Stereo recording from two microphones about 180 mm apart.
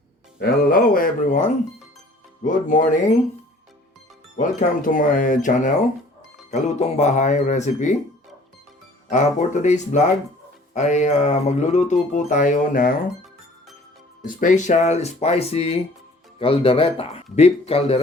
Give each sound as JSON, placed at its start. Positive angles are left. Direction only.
{"t": 0.3, "sound": "speech", "side_deg": 50}
{"t": 4.4, "sound": "speech", "side_deg": 50}
{"t": 9.0, "sound": "speech", "side_deg": 40}
{"t": 14.3, "sound": "speech", "side_deg": 45}